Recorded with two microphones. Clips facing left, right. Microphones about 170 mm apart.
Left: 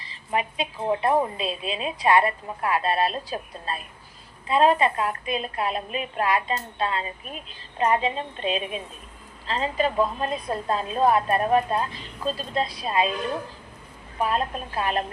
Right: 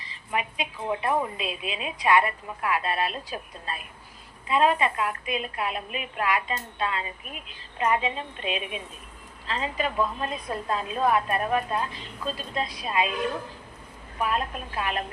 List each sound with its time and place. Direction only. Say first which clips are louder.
0.0 s a woman's voice: left 3 dB; 35° left (ahead or behind)
14.2 s a woman's voice: left 3 dB; 35° left (ahead or behind)